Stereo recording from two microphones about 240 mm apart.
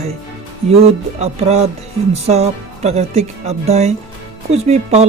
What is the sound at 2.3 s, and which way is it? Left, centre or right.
Speech, right.